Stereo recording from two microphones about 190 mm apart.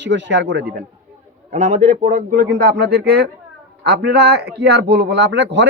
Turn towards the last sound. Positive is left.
turn(degrees=-70)  # may be behind; listen again after turning